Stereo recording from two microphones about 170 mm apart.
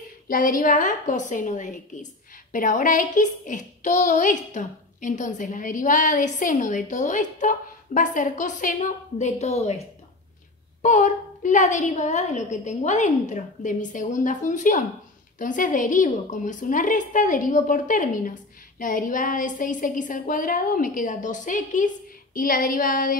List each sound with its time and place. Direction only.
0.3 s a woman's voice: 55° left (ahead or behind); by 9.8 s 40° left (ahead or behind)
10.8 s a woman's voice: 45° left (ahead or behind)